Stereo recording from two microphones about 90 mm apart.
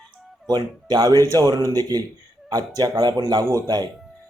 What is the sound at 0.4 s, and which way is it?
A man's voice, 50° right (ahead or behind).